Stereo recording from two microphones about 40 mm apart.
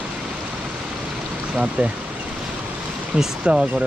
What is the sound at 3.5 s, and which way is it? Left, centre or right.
Speech, right.